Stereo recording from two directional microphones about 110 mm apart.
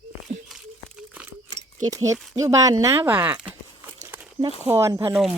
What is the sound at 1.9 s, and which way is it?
Speech, 30° right (ahead or behind).